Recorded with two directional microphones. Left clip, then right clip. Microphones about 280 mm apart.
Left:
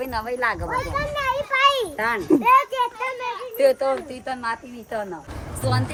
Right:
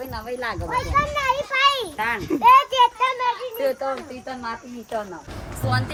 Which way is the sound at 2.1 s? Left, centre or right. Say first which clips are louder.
Left 7 dB; centre.